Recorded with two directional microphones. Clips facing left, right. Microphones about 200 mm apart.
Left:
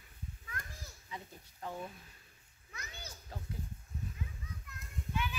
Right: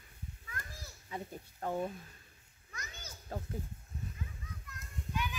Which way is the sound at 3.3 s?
50° right (ahead or behind).